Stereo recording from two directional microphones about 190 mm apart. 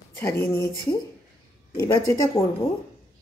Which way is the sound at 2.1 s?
15° left (ahead or behind).